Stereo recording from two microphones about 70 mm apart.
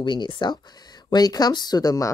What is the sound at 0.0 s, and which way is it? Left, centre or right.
Speech, left.